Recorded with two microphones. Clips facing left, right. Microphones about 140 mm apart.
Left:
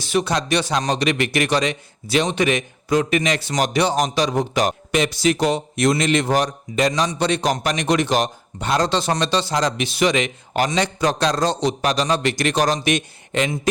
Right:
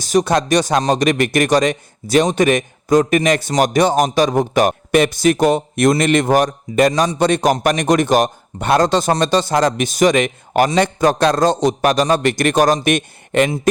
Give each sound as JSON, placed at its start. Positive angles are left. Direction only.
{"t": 0.0, "sound": "a man's voice", "side_deg": -40}